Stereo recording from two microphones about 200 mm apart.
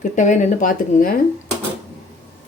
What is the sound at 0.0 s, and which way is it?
Speech, 40° left (ahead or behind).